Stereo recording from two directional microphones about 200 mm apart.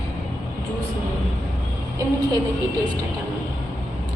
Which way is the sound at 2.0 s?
15° right (ahead or behind).